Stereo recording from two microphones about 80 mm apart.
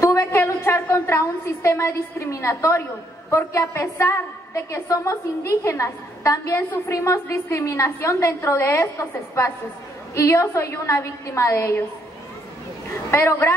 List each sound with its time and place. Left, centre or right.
0.0 s a woman's voice: left
10.1 s a woman's voice: left
13.1 s a woman's voice: left